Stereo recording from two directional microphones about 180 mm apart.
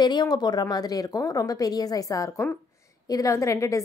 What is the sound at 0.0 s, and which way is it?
A woman's voice, 25° left (ahead or behind).